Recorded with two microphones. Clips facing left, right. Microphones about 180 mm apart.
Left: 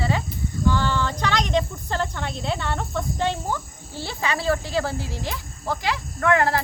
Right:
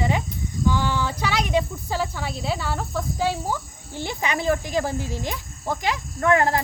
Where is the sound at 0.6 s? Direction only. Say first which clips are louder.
Even; 10° right (ahead or behind).